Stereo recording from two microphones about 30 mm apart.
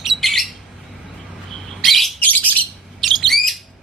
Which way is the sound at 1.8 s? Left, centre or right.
Centre.